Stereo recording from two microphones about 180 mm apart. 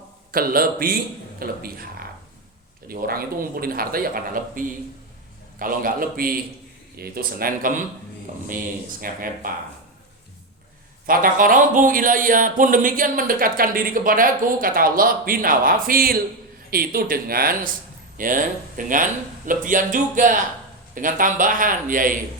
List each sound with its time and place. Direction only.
0.3 s a man's voice: 55° right (ahead or behind)
9.0 s a man's voice: 50° right (ahead or behind)
11.0 s a man's voice: 50° right (ahead or behind)